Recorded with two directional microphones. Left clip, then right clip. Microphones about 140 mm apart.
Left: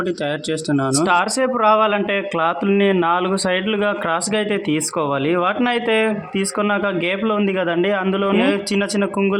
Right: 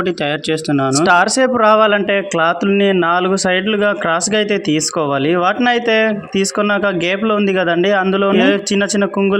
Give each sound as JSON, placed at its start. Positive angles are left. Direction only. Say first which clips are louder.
{"t": 0.7, "sound": "speech", "louder": "right 3 dB", "side_deg": -20}
{"t": 1.0, "sound": "speech", "louder": "right 6 dB", "side_deg": -35}